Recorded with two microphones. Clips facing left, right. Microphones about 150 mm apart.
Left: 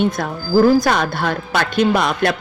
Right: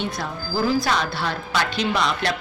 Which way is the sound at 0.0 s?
50° left (ahead or behind).